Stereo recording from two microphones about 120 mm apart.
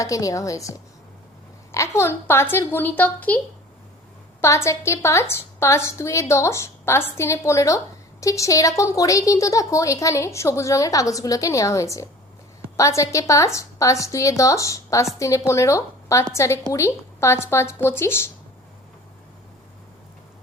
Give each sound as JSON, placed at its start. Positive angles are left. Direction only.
{"t": 0.0, "sound": "a woman's voice", "side_deg": 30}